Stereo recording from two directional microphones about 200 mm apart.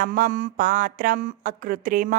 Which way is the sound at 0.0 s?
40° right (ahead or behind).